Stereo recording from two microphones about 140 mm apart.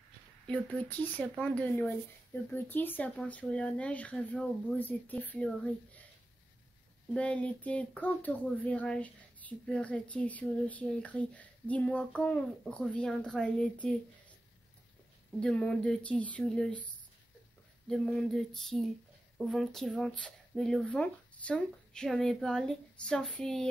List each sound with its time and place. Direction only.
0.5 s speech: 10° left (ahead or behind)
7.2 s speech: 10° left (ahead or behind)
15.4 s speech: 5° left (ahead or behind)